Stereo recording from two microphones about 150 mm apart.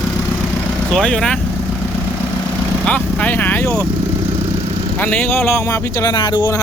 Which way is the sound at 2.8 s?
10° left (ahead or behind).